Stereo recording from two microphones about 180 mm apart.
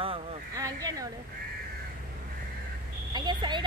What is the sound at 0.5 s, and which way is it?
Speech, 20° right (ahead or behind).